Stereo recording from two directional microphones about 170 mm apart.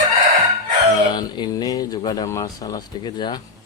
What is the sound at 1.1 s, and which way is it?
Speech, 25° left (ahead or behind).